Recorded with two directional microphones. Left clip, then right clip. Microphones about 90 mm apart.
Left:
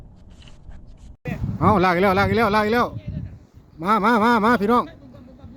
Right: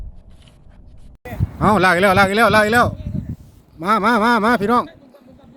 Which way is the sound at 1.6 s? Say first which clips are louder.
Right 4 dB; 5° left (ahead or behind).